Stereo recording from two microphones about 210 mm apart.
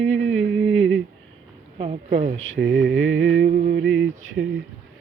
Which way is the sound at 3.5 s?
55° right (ahead or behind).